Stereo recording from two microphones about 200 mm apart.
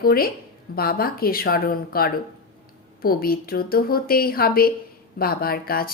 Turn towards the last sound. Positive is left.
turn(degrees=50)  # may be behind; listen again after turning